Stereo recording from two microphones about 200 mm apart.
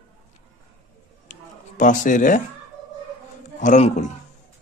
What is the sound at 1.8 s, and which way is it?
Speech, 40° left (ahead or behind).